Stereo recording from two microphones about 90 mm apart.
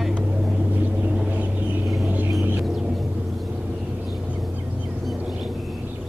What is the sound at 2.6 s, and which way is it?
Rumble, 5° right (ahead or behind).